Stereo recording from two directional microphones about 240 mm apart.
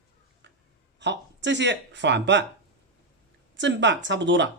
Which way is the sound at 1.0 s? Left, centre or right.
Right.